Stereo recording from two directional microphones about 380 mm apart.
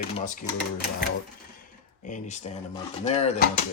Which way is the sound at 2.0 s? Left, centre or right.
Centre.